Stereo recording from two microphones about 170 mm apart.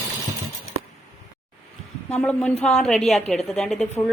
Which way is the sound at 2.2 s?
10° left (ahead or behind).